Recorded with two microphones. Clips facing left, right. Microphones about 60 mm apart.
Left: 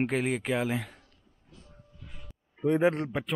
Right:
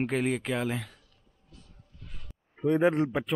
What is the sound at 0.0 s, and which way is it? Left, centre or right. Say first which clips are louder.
Speech: even; centre.